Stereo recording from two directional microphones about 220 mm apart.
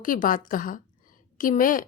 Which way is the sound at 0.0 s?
40° left (ahead or behind).